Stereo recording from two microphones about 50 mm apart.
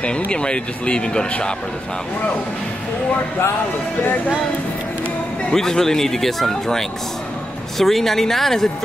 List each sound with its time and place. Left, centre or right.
0.3 s speech: centre
5.5 s speech: centre